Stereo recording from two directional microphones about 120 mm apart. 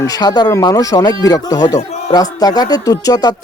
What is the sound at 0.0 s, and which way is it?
Speech, 30° left (ahead or behind).